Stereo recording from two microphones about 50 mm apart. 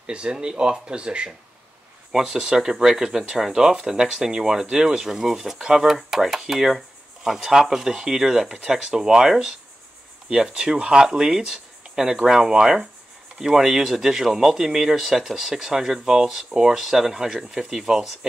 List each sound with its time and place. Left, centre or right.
0.0 s speech: centre